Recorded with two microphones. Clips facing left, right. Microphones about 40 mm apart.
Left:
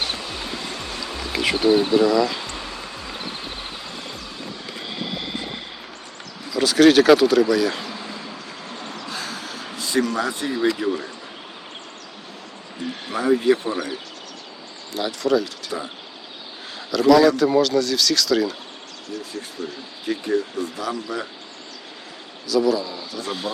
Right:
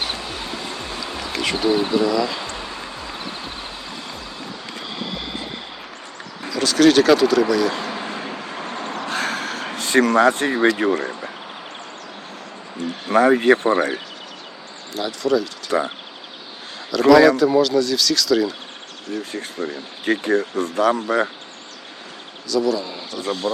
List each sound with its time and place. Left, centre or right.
1.3 s speech: centre
4.9 s vehicle: centre
6.5 s speech: centre
7.8 s vehicle: right
13.1 s speech: right
14.9 s speech: centre
15.7 s speech: right
17.1 s speech: centre
19.3 s speech: right
22.4 s speech: centre
22.8 s a man's voice: right